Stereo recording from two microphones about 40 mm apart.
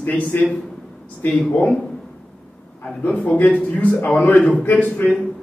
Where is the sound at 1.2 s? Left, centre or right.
Left.